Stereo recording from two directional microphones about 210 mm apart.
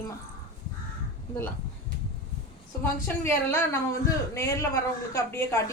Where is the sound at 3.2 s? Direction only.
10° left (ahead or behind).